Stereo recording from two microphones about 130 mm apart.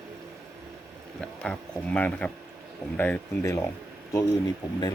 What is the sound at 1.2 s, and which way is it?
Speech, 5° left (ahead or behind).